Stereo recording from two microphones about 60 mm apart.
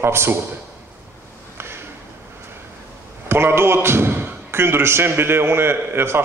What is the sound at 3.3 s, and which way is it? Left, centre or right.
A man's voice, right.